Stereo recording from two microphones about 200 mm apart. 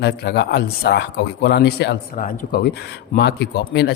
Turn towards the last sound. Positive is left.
turn(degrees=55)  # may be behind; listen again after turning